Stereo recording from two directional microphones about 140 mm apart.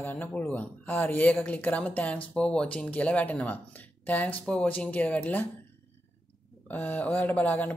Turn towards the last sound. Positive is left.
turn(degrees=10)  # may be behind; listen again after turning